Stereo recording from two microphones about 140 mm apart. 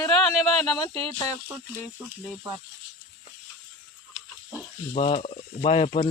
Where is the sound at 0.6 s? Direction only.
10° left (ahead or behind).